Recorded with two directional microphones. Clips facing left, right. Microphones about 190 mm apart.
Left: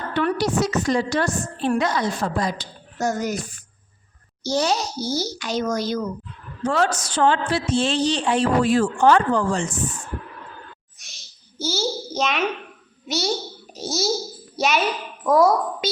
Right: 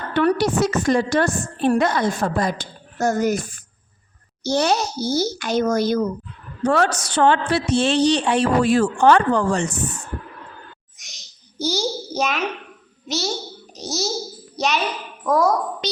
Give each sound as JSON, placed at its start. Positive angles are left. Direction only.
{"t": 0.1, "sound": "a woman's voice", "side_deg": -50}
{"t": 6.6, "sound": "a woman's voice", "side_deg": -65}
{"t": 10.9, "sound": "a sound", "side_deg": -15}
{"t": 13.1, "sound": "a child's voice", "side_deg": 0}
{"t": 15.2, "sound": "speech", "side_deg": 5}